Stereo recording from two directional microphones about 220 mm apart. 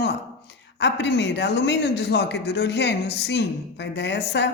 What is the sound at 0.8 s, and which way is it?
A man's voice, 50° left (ahead or behind).